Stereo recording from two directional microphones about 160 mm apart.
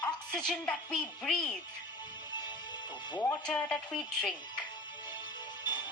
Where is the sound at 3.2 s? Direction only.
10° left (ahead or behind).